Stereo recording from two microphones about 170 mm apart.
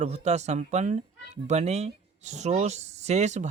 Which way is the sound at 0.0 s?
40° right (ahead or behind).